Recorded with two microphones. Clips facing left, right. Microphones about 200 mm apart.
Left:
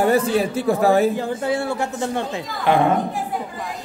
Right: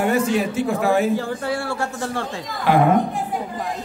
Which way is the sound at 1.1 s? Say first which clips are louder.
Left 1 dB; 20° left (ahead or behind).